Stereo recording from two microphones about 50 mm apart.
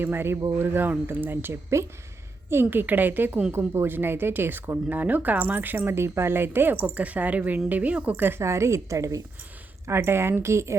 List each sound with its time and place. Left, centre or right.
0.0 s speech: right
4.9 s speech: right
8.4 s a woman's voice: right
10.0 s a woman's voice: right
10.4 s speech: right